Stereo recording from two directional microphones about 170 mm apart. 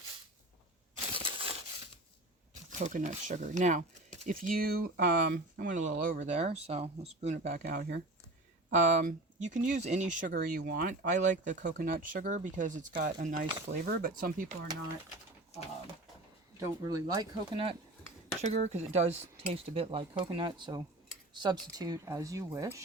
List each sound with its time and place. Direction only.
1.1 s crushing: 30° right (ahead or behind)
2.6 s speech: 45° right (ahead or behind)
7.5 s speech: 65° right (ahead or behind)
8.7 s speech: 45° right (ahead or behind)
11.1 s speech: 45° right (ahead or behind)
16.6 s speech: 25° right (ahead or behind)
18.4 s speech: 40° right (ahead or behind)
19.1 s speech: 10° right (ahead or behind)
19.5 s speech: 35° right (ahead or behind); by 22.8 s 15° right (ahead or behind)